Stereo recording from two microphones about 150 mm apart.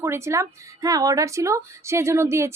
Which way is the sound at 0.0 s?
15° right (ahead or behind).